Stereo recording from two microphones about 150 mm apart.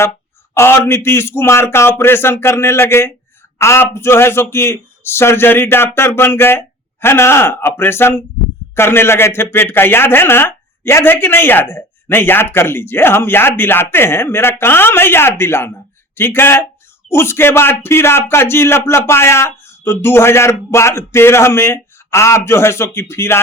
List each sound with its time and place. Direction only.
0.5 s speech: 15° left (ahead or behind)